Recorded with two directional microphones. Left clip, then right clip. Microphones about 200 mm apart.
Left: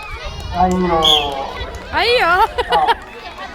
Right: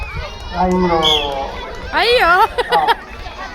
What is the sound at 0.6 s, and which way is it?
Speech, 30° left (ahead or behind).